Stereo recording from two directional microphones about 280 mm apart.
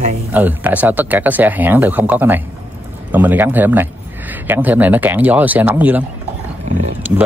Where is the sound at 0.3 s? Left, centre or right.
Centre.